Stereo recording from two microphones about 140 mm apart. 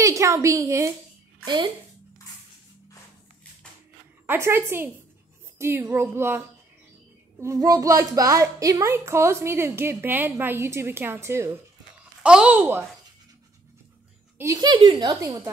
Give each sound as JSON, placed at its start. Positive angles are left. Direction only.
{"t": 0.0, "sound": "a woman's voice", "side_deg": -20}
{"t": 1.4, "sound": "speech", "side_deg": -30}
{"t": 4.3, "sound": "a child's voice", "side_deg": -15}
{"t": 12.2, "sound": "speech", "side_deg": -5}
{"t": 14.4, "sound": "a child's voice", "side_deg": -25}